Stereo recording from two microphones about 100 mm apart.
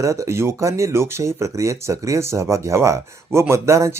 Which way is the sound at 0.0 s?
30° right (ahead or behind).